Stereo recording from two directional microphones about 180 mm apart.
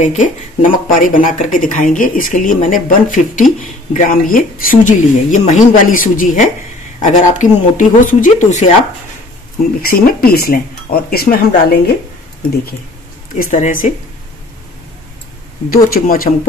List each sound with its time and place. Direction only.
0.0 s speech: 45° left (ahead or behind)
9.8 s speech: 55° left (ahead or behind)
13.4 s speech: 45° left (ahead or behind)
15.7 s speech: 55° left (ahead or behind)